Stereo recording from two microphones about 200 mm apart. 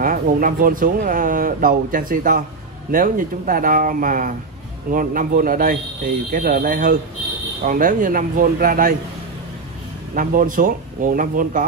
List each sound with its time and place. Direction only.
0.0 s speech: 40° right (ahead or behind)
10.1 s speech: 45° right (ahead or behind)